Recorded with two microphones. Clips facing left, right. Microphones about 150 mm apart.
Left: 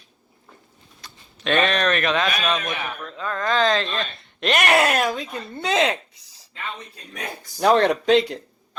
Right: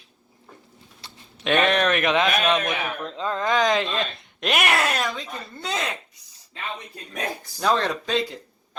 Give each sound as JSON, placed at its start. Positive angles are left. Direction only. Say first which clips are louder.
{"t": 1.0, "sound": "a sound", "louder": "even", "side_deg": -30}
{"t": 1.5, "sound": "a man's voice", "louder": "even", "side_deg": -15}
{"t": 3.0, "sound": "a man's voice", "louder": "right 1 dB", "side_deg": -25}
{"t": 4.9, "sound": "speech", "louder": "left 4 dB", "side_deg": 50}
{"t": 5.6, "sound": "speech", "louder": "left 8 dB", "side_deg": 90}
{"t": 7.6, "sound": "speech", "louder": "left 6 dB", "side_deg": 60}